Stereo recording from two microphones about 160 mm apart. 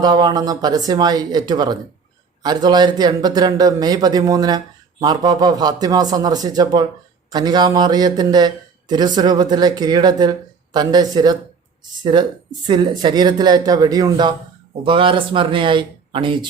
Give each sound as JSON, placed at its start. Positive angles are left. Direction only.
{"t": 0.0, "sound": "a man's voice", "side_deg": -25}
{"t": 12.6, "sound": "a man's voice", "side_deg": -30}
{"t": 14.8, "sound": "speech", "side_deg": -35}